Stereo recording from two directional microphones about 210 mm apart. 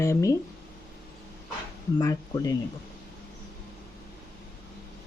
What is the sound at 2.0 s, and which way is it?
Speech, 15° left (ahead or behind).